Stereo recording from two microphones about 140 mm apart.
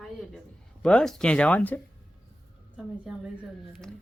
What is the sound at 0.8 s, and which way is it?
Speech, 5° left (ahead or behind).